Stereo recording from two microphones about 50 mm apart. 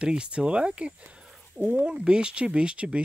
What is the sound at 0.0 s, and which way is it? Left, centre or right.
Speech, centre.